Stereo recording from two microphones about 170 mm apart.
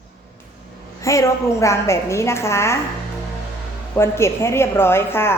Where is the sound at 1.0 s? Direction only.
20° left (ahead or behind).